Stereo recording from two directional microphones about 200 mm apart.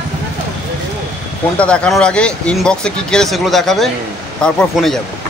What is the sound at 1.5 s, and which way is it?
Speech, 5° left (ahead or behind).